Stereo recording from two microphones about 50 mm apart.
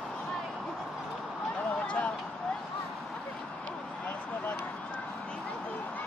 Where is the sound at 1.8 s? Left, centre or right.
Left.